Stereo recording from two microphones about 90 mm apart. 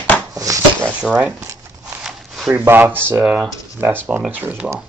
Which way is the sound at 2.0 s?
5° right (ahead or behind).